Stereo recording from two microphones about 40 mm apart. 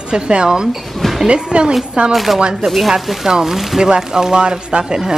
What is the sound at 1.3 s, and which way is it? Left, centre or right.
Speech, right.